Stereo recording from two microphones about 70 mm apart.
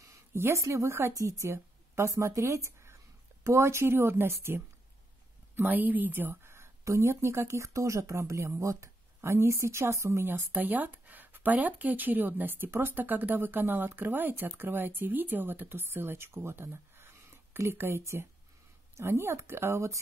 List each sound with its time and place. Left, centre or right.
0.1 s speech: right
1.1 s a woman's voice: right
5.6 s a woman's voice: right
10.5 s a woman's voice: right
17.6 s a woman's voice: right